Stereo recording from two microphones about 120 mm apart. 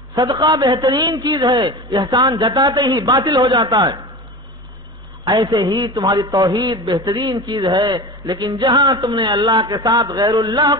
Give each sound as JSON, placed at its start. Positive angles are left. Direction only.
{"t": 0.1, "sound": "a man's voice", "side_deg": -35}
{"t": 5.3, "sound": "a man's voice", "side_deg": -30}
{"t": 9.1, "sound": "a man's voice", "side_deg": -45}